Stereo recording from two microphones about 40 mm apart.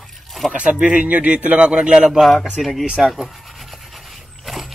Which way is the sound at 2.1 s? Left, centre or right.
Centre.